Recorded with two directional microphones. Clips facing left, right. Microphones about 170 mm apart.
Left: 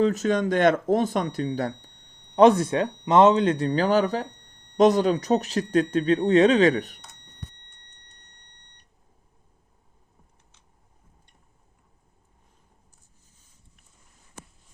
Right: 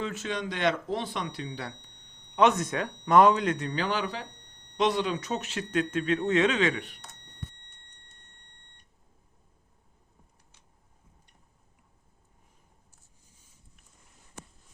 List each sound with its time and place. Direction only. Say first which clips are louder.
0.0 s speech: left 11 dB; 40° left (ahead or behind)
2.3 s speech: left 7 dB; 35° left (ahead or behind)